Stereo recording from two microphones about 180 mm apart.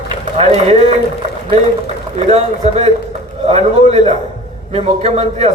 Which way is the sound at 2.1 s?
35° right (ahead or behind).